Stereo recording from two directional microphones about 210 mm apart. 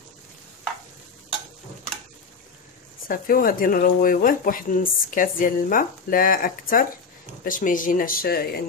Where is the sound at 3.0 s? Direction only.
45° left (ahead or behind).